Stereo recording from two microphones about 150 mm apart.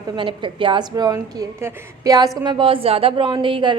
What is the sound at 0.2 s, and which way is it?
A woman's voice, 35° right (ahead or behind).